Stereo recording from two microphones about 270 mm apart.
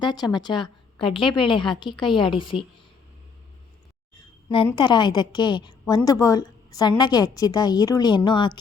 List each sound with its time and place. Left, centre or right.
0.0 s a woman's voice: centre
4.4 s a woman's voice: centre